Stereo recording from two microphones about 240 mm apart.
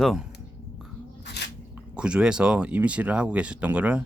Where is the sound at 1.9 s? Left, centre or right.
Centre.